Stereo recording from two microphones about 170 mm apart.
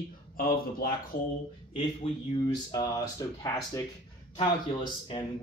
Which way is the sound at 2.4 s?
20° left (ahead or behind).